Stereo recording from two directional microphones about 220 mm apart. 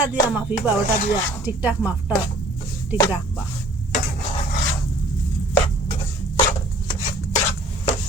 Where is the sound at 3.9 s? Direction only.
35° left (ahead or behind).